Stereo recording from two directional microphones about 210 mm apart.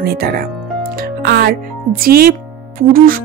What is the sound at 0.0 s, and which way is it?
Speech, 50° right (ahead or behind).